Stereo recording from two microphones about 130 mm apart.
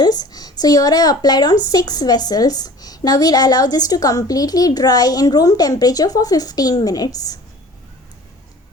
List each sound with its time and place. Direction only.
0.0 s a woman's voice: 30° left (ahead or behind)